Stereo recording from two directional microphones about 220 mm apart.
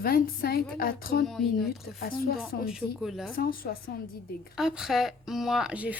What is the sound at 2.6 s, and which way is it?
Speech, centre (ahead or behind).